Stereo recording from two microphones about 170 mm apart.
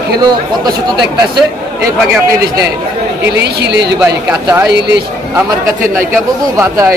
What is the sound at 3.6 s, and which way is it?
Speech, 85° right.